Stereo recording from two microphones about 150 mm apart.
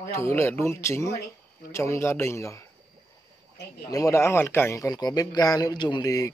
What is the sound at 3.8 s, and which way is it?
Speech, 20° left (ahead or behind).